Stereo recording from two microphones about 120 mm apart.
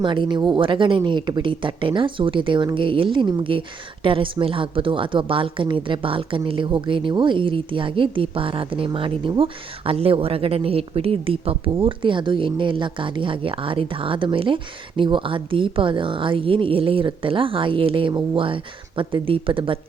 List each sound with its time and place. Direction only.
0.0 s a woman's voice: 40° right (ahead or behind)